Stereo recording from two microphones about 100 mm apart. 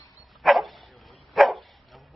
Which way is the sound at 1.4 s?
Centre (ahead or behind).